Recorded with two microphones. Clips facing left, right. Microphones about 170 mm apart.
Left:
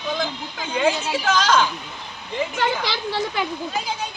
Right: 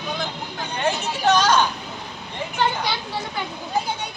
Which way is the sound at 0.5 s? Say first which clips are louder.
Left 3 dB; 90° left.